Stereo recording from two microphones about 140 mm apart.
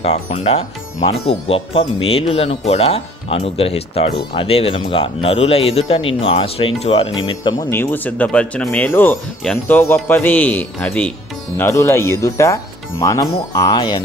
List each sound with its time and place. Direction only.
0.0 s speech: 45° left (ahead or behind)
7.2 s speech: 35° left (ahead or behind)
7.7 s speech: 15° left (ahead or behind); by 14.0 s 30° left (ahead or behind)